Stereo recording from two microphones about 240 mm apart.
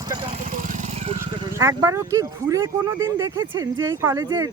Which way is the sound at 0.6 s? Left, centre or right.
Right.